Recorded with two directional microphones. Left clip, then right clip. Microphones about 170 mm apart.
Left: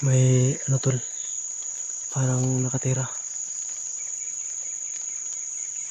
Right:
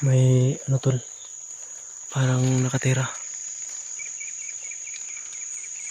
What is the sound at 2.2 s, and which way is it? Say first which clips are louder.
Speech: right 3 dB; 15° right (ahead or behind).